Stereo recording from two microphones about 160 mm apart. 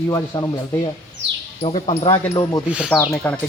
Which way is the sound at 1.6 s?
35° left (ahead or behind).